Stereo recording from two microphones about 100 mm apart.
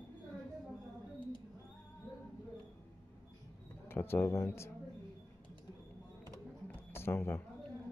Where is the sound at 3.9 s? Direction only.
20° left (ahead or behind).